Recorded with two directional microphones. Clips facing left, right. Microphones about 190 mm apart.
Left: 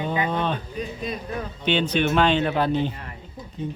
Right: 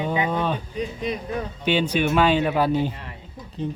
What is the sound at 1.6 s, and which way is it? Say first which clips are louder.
Speech: even; 10° right (ahead or behind).